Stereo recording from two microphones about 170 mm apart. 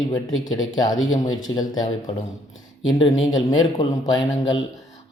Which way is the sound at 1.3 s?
25° left (ahead or behind).